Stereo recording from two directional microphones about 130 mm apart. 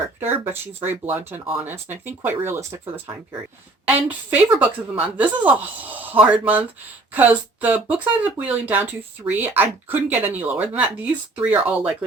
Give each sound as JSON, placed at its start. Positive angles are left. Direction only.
{"t": 0.3, "sound": "speech", "side_deg": -15}